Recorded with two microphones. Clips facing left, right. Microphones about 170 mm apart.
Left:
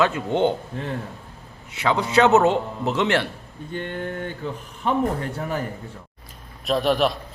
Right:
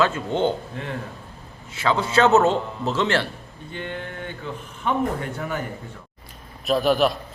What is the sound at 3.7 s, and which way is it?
Speech, 40° left (ahead or behind).